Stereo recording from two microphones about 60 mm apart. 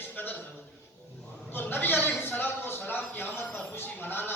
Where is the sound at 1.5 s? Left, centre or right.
Left.